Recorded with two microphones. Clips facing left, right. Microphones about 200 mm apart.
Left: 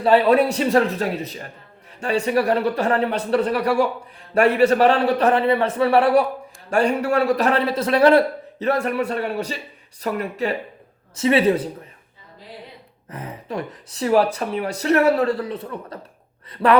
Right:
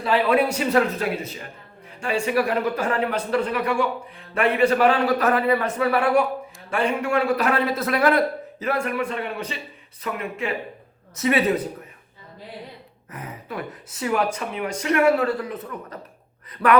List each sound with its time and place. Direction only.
0.0 s speech: 35° left (ahead or behind)
13.1 s speech: 30° left (ahead or behind)